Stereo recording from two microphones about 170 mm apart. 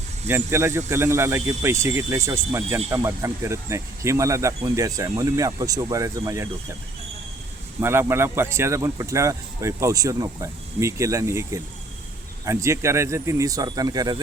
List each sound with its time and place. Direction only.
0.3 s speech: 15° right (ahead or behind)
7.8 s speech: 15° right (ahead or behind)